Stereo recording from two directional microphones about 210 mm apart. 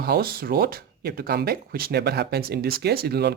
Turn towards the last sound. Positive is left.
turn(degrees=-50)  # may be behind; listen again after turning